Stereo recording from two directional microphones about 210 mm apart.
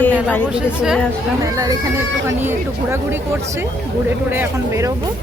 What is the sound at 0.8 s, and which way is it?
Speech, 5° right (ahead or behind).